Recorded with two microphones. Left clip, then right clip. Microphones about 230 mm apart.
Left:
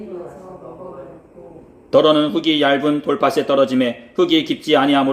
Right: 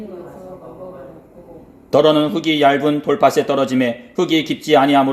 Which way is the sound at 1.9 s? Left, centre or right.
Right.